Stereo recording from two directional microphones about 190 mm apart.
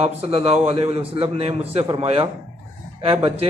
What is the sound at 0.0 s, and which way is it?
A man's voice, 30° right (ahead or behind).